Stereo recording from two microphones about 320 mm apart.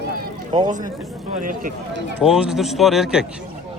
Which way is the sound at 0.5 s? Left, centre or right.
Right.